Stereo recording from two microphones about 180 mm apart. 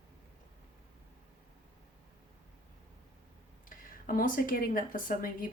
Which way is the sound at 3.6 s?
50° left (ahead or behind).